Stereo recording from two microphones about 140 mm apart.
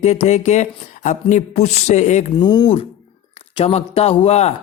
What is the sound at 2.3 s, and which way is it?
Speech, 30° left (ahead or behind).